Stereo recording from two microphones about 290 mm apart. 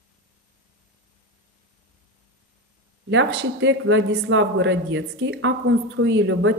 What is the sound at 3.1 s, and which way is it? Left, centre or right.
Speech, right.